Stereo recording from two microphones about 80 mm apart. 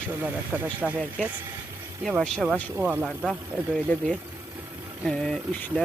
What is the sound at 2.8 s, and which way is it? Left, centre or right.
Speech, centre.